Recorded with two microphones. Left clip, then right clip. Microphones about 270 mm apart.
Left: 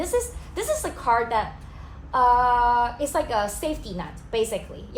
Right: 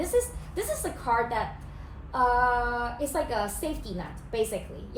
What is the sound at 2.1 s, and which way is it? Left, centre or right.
A woman's voice, centre.